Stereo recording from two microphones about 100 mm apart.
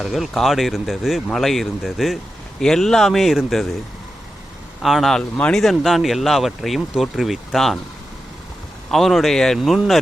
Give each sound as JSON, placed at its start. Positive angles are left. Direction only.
{"t": 0.0, "sound": "speech", "side_deg": 0}
{"t": 4.8, "sound": "speech", "side_deg": 0}
{"t": 8.9, "sound": "speech", "side_deg": 0}